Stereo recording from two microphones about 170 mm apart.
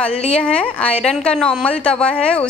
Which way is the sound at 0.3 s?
5° left (ahead or behind).